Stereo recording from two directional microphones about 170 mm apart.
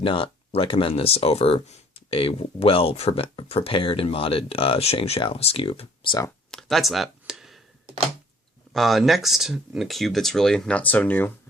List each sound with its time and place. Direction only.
0.0 s speech: 30° left (ahead or behind)
6.5 s a sound: centre (ahead or behind)
8.7 s speech: centre (ahead or behind)